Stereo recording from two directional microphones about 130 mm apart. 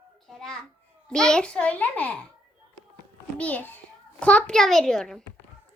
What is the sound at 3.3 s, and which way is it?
A woman's voice, 10° left (ahead or behind).